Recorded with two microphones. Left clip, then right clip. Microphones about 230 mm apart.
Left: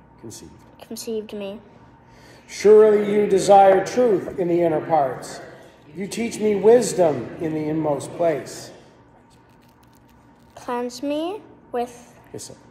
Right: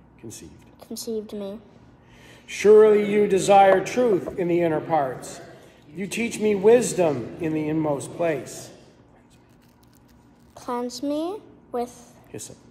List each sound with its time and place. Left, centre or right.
0.5 s speech: centre
1.0 s a woman's voice: centre
1.3 s a woman's voice: centre
2.6 s a man's voice: centre
10.6 s a woman's voice: centre